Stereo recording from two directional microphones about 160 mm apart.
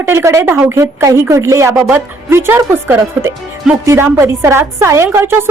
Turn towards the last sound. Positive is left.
turn(degrees=-15)  # may be behind; listen again after turning